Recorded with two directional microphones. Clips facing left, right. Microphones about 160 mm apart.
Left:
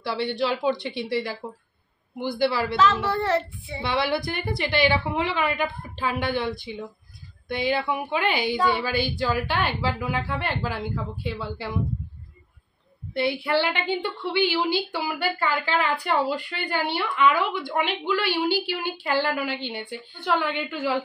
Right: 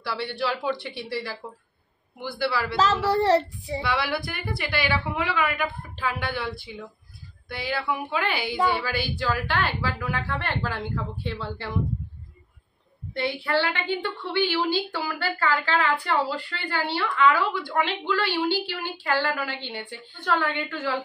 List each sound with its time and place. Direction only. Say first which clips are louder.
0.0 s a woman's voice: left 3 dB; 20° left (ahead or behind)
2.7 s speech: even; 35° right (ahead or behind)
3.8 s a woman's voice: left 4 dB; 25° left (ahead or behind)
8.9 s speech: left 3 dB; 10° right (ahead or behind)
9.2 s a woman's voice: right 1 dB; 20° left (ahead or behind)
13.1 s a woman's voice: left 2 dB; 15° left (ahead or behind)